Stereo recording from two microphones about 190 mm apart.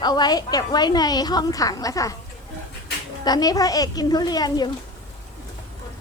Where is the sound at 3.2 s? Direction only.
20° left (ahead or behind).